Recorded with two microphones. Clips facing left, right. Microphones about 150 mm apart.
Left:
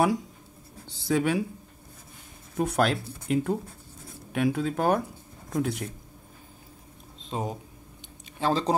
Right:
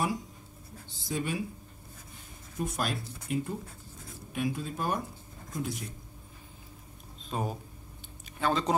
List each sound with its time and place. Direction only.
0.8 s speech: 70° left (ahead or behind)
2.5 s speech: 65° left (ahead or behind)
7.2 s speech: 20° left (ahead or behind)
8.4 s speech: 30° left (ahead or behind)